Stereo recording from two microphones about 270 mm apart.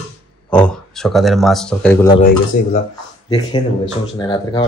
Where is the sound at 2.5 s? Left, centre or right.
Left.